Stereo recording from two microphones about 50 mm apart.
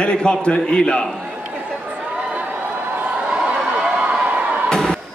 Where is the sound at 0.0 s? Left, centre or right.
Centre.